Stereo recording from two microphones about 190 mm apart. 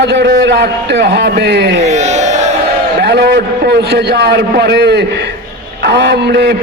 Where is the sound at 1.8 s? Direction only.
35° right (ahead or behind).